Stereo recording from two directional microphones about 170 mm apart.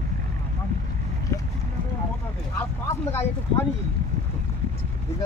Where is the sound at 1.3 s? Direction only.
20° left (ahead or behind).